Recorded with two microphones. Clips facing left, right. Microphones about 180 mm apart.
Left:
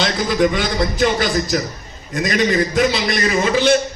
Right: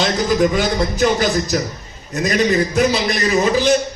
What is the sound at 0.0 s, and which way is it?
A man's voice, 45° right (ahead or behind).